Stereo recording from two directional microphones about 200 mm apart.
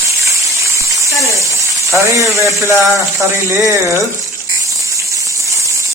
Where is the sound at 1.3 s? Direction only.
15° right (ahead or behind).